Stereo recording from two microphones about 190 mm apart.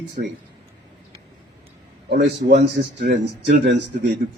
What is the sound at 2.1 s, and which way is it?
Speech, 60° right (ahead or behind).